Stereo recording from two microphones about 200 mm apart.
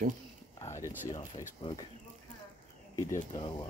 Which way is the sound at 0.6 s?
15° left (ahead or behind).